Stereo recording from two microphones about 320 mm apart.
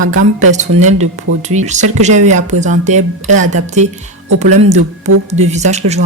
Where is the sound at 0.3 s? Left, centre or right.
Right.